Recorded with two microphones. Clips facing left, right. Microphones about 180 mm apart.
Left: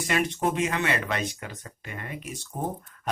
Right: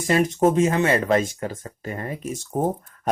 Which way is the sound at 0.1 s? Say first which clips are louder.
Right 8 dB; 35° right (ahead or behind).